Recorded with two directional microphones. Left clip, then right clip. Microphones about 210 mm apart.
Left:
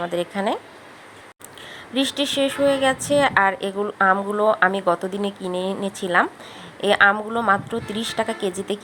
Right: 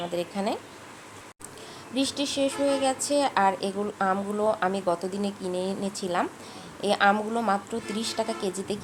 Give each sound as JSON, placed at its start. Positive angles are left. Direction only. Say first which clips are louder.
{"t": 0.0, "sound": "a woman's voice", "louder": "left 6 dB", "side_deg": 15}
{"t": 2.0, "sound": "a woman's voice", "louder": "left 6 dB", "side_deg": 15}